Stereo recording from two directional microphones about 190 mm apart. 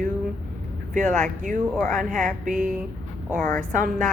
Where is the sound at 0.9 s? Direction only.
40° right (ahead or behind).